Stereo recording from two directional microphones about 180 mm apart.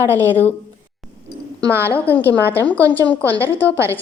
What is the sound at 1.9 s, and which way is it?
A woman's voice, 10° left (ahead or behind).